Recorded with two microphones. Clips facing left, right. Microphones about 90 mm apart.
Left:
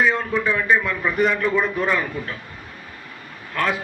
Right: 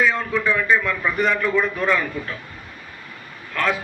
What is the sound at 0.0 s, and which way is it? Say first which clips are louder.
A man's voice: even; 10° left (ahead or behind).